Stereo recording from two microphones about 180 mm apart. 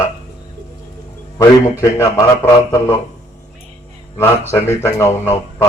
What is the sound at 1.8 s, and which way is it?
A man's voice, 20° left (ahead or behind).